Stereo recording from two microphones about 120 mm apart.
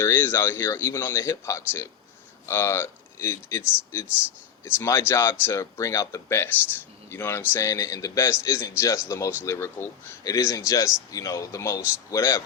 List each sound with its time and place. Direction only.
0.0 s speech: 20° left (ahead or behind)
4.6 s speech: 20° left (ahead or behind)